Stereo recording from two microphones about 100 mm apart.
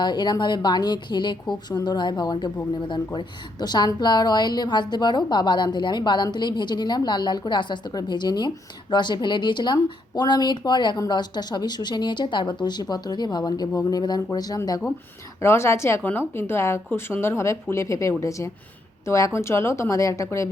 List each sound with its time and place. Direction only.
0.0 s a woman's voice: 45° left (ahead or behind)
15.4 s speech: 25° left (ahead or behind)